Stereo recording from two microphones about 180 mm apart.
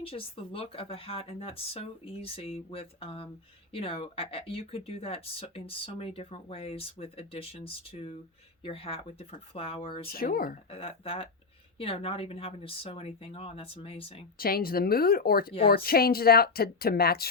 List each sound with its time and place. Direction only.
0.0 s speech: 30° left (ahead or behind)
10.1 s speech: 55° left (ahead or behind)
10.7 s speech: 30° left (ahead or behind)
14.3 s speech: 55° left (ahead or behind)